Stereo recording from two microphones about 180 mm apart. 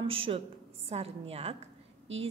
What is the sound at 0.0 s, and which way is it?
A woman's voice, 30° right (ahead or behind).